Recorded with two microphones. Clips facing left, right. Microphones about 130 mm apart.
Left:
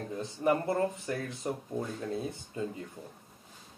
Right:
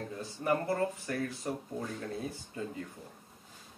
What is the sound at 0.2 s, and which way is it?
Speech, 25° left (ahead or behind).